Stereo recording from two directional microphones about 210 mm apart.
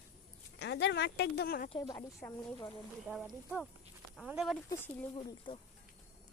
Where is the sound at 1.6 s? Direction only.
20° left (ahead or behind).